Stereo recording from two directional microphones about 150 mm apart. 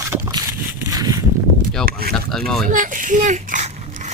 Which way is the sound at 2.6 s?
60° right (ahead or behind).